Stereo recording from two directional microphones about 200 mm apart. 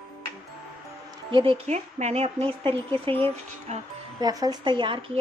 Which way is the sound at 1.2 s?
25° right (ahead or behind).